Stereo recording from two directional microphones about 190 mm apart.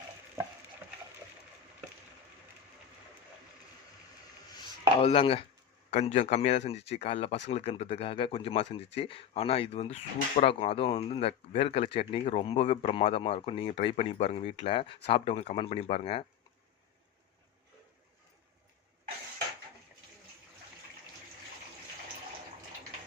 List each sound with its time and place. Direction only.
4.5 s chopping: 30° left (ahead or behind)
5.9 s speech: 35° left (ahead or behind)